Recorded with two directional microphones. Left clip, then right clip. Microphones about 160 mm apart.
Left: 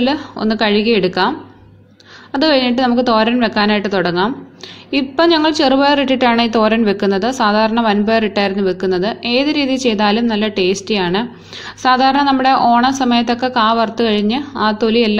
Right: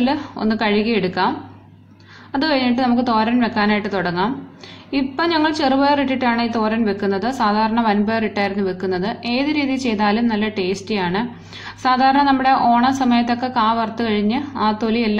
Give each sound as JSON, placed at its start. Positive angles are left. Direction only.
{"t": 0.0, "sound": "a woman's voice", "side_deg": 25}
{"t": 2.3, "sound": "a woman's voice", "side_deg": 30}